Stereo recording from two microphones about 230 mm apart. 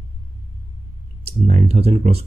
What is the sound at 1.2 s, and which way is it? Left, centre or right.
Speech, right.